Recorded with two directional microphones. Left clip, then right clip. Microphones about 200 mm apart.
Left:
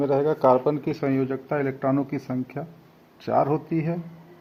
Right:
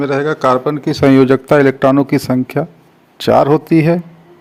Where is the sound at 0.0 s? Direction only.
25° right (ahead or behind).